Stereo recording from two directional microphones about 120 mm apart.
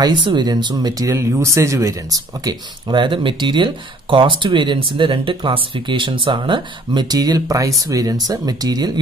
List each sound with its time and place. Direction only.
0.0 s speech: 40° right (ahead or behind)